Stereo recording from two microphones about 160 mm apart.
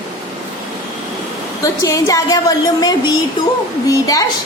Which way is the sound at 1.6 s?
20° left (ahead or behind).